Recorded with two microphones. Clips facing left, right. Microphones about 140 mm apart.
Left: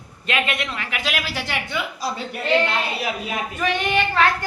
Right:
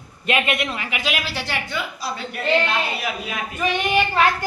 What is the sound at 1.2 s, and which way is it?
Speech, 15° left (ahead or behind).